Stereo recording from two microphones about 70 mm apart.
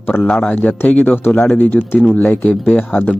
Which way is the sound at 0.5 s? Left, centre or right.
Left.